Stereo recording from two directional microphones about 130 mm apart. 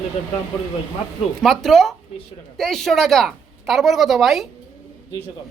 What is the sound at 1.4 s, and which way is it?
A woman's voice, centre (ahead or behind).